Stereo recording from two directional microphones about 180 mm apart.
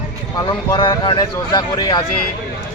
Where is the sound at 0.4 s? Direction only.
25° left (ahead or behind).